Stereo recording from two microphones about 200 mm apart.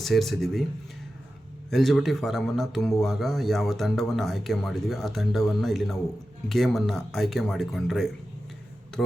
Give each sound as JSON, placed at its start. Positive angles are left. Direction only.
{"t": 0.0, "sound": "speech", "side_deg": 0}
{"t": 1.7, "sound": "speech", "side_deg": 0}